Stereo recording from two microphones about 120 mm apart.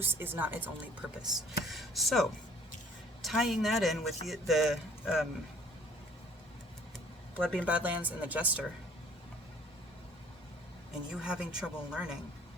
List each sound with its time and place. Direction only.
0.0 s speech: 15° right (ahead or behind)
1.2 s speech: centre (ahead or behind)
7.3 s speech: 10° left (ahead or behind)
7.6 s speech: 10° right (ahead or behind)
11.1 s speech: 5° right (ahead or behind)